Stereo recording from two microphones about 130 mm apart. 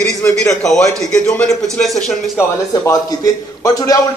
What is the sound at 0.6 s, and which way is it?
Speech, 5° left (ahead or behind).